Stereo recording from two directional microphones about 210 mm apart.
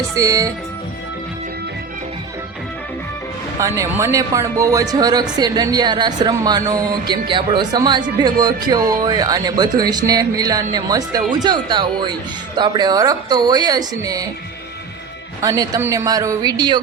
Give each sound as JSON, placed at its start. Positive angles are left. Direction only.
{"t": 0.2, "sound": "speech", "side_deg": -15}
{"t": 3.6, "sound": "speech", "side_deg": -15}
{"t": 15.4, "sound": "speech", "side_deg": -15}